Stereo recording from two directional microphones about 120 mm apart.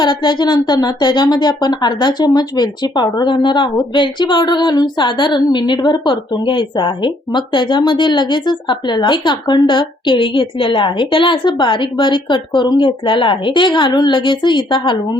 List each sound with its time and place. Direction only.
0.0 s a woman's voice: 40° left (ahead or behind)